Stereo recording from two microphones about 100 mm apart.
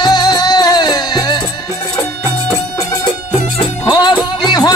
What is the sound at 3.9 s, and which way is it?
Music, 45° left (ahead or behind).